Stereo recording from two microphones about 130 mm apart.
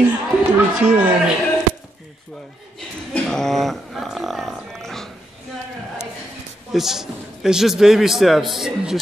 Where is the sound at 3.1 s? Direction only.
5° left (ahead or behind).